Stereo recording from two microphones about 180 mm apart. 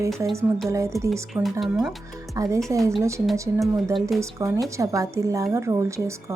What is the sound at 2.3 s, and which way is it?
Speech, 20° right (ahead or behind).